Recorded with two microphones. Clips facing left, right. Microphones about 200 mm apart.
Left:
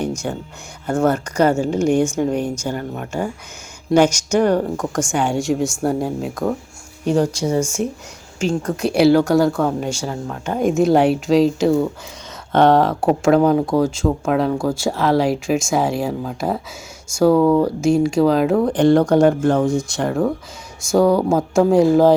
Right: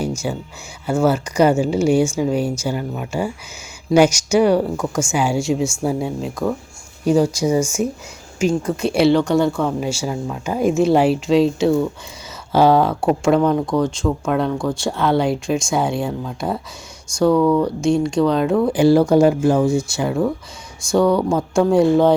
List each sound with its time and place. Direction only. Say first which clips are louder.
0.2 s speech: right 1 dB; 5° right (ahead or behind)
17.3 s speech: left 1 dB; 25° left (ahead or behind)
17.6 s speech: left 2 dB; 5° left (ahead or behind)